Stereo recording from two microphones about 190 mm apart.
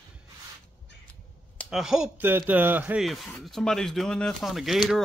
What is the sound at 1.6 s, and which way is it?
Speech, centre (ahead or behind).